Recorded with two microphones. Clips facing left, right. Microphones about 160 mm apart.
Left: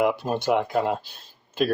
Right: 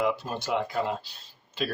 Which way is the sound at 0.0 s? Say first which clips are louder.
Left 5 dB; 55° left (ahead or behind).